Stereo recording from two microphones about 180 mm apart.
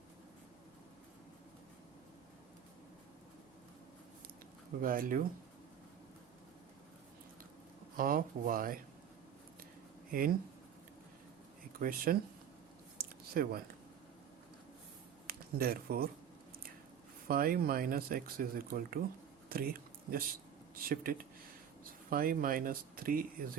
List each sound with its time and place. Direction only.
4.8 s speech: 50° right (ahead or behind)
7.9 s speech: 50° right (ahead or behind)
10.1 s speech: 50° right (ahead or behind)
11.8 s speech: 55° right (ahead or behind)
13.0 s a sound: 55° right (ahead or behind)
15.3 s speech: 55° right (ahead or behind)
17.2 s speech: 55° right (ahead or behind)
19.5 s a sound: 55° right (ahead or behind)
20.7 s speech: 55° right (ahead or behind)